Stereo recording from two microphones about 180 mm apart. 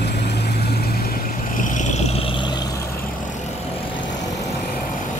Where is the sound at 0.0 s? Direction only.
70° left (ahead or behind).